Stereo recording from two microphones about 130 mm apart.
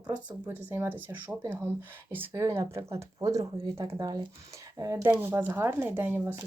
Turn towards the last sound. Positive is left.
turn(degrees=-15)  # may be behind; listen again after turning